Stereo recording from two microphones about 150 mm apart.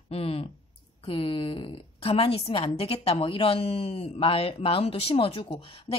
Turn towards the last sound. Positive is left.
turn(degrees=40)  # may be behind; listen again after turning